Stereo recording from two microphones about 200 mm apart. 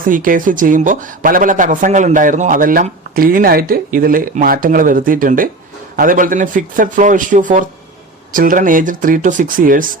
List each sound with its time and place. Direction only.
0.0 s speech: 45° right (ahead or behind)